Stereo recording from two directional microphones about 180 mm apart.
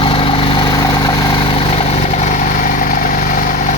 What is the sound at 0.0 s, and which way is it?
Vehicle, 30° left (ahead or behind).